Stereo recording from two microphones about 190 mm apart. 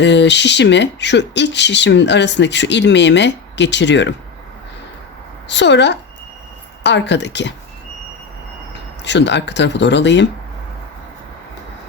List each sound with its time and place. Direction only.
0.0 s speech: 65° left (ahead or behind)
5.5 s speech: 65° left (ahead or behind)
9.0 s speech: 65° left (ahead or behind)